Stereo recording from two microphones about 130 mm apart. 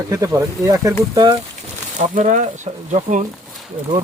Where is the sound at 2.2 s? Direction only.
70° right (ahead or behind).